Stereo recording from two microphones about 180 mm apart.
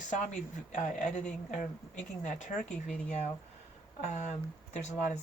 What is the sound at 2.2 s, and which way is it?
Speech, 40° left (ahead or behind).